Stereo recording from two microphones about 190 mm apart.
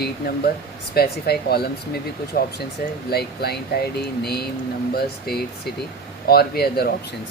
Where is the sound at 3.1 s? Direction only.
55° left (ahead or behind).